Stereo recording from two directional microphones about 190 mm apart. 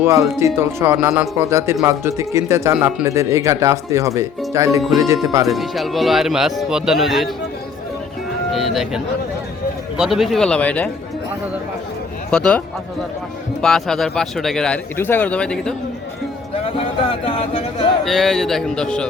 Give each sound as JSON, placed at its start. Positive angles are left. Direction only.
{"t": 0.0, "sound": "speech", "side_deg": -15}
{"t": 5.5, "sound": "speech", "side_deg": 0}
{"t": 8.5, "sound": "speech", "side_deg": 0}
{"t": 10.0, "sound": "speech", "side_deg": 0}
{"t": 12.3, "sound": "speech", "side_deg": 5}
{"t": 16.6, "sound": "speech", "side_deg": 30}
{"t": 18.0, "sound": "speech", "side_deg": 0}